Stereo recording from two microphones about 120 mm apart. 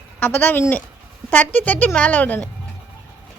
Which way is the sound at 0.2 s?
15° left (ahead or behind).